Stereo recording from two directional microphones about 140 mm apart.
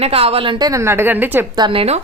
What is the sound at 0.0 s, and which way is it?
Speech, 45° right (ahead or behind).